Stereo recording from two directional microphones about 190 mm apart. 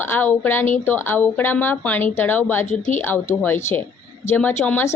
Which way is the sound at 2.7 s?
40° left (ahead or behind).